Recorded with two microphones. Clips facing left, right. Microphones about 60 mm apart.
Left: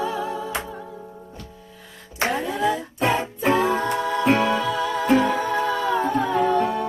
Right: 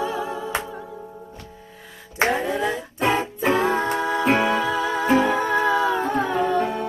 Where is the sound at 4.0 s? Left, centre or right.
Centre.